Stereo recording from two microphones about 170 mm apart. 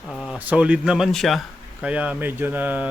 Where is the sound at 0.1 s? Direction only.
Centre (ahead or behind).